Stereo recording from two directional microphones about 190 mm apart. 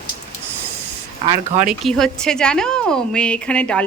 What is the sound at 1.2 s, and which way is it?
Speech, 40° right (ahead or behind).